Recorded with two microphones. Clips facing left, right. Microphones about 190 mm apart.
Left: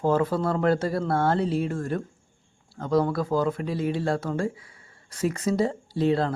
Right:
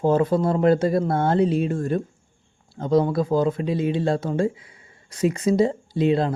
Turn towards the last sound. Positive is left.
turn(degrees=-20)  # may be behind; listen again after turning